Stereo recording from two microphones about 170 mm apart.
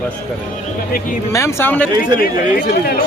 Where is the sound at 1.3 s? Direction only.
15° left (ahead or behind).